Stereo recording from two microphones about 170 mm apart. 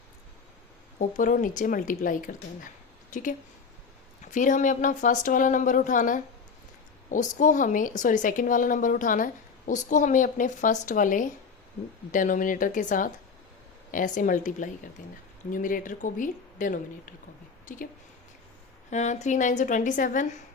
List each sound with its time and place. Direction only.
0.9 s a woman's voice: 50° left (ahead or behind)
18.9 s a woman's voice: 45° left (ahead or behind)